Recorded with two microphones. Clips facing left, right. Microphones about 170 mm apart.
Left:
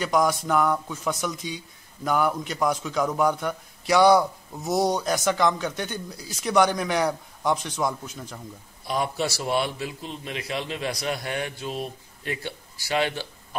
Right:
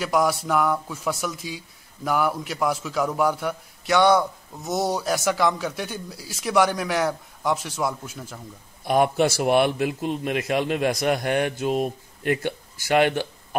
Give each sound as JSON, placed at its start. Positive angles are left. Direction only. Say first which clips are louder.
{"t": 0.0, "sound": "a man's voice", "louder": "right 1 dB", "side_deg": -5}
{"t": 8.8, "sound": "a man's voice", "louder": "right 7 dB", "side_deg": -55}